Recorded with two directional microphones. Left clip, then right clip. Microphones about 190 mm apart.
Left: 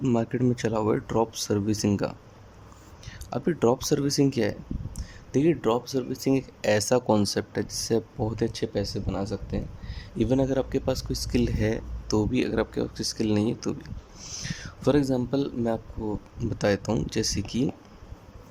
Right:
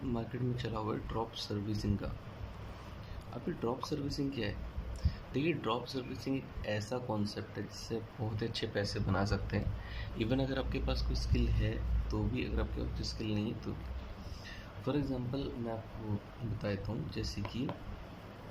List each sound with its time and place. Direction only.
0.1 s speech: 45° left (ahead or behind)
3.2 s speech: 50° left (ahead or behind)
5.3 s speech: 35° left (ahead or behind)
6.2 s speech: 50° left (ahead or behind)
8.4 s speech: 30° left (ahead or behind); by 17.7 s 50° left (ahead or behind)